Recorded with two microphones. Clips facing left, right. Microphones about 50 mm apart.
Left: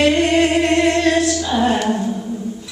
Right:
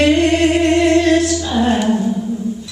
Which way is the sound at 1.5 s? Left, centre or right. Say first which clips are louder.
Right 2 dB; centre.